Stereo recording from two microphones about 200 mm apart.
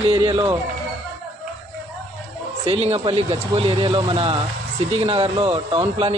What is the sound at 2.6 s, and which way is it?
Speech, 30° right (ahead or behind).